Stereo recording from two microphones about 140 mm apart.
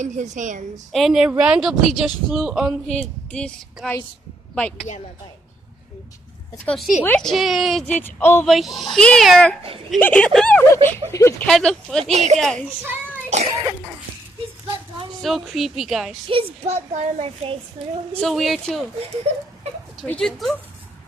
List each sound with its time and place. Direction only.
0.0 s a woman's voice: 60° right (ahead or behind)
0.9 s speech: centre (ahead or behind)
3.0 s speech: 5° left (ahead or behind)
6.7 s speech: centre (ahead or behind)
7.9 s speech: 15° left (ahead or behind)
8.4 s speech: centre (ahead or behind); by 11.4 s 20° left (ahead or behind)
11.4 s speech: 5° left (ahead or behind)
12.1 s a child's voice: 55° right (ahead or behind)
12.4 s speech: 5° left (ahead or behind)
15.2 s speech: centre (ahead or behind)
16.3 s a child's voice: 50° right (ahead or behind)
18.2 s speech: centre (ahead or behind)
19.3 s a child's voice: 45° right (ahead or behind)
20.1 s speech: 5° left (ahead or behind)